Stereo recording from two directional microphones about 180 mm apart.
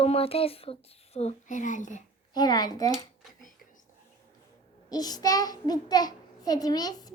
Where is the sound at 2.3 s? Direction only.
20° left (ahead or behind).